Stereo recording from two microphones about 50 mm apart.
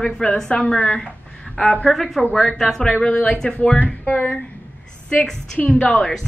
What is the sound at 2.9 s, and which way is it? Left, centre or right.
Speech, left.